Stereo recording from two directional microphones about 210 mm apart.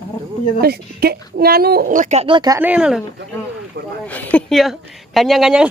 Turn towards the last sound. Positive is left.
turn(degrees=0)  # may be behind; listen again after turning